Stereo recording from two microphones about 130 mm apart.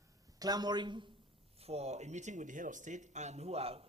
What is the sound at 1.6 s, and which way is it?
Speech, 55° right (ahead or behind).